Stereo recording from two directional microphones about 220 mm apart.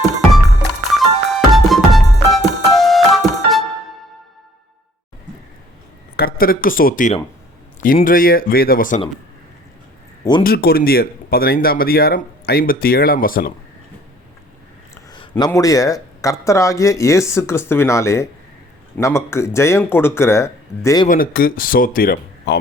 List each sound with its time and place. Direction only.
0.9 s music: centre (ahead or behind)
6.1 s speech: 40° left (ahead or behind)
10.4 s speech: 45° left (ahead or behind)
15.1 s speech: 20° left (ahead or behind)
21.1 s speech: 40° left (ahead or behind)